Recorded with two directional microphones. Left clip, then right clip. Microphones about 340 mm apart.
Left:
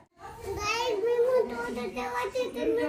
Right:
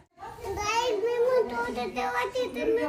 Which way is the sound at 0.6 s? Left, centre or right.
Centre.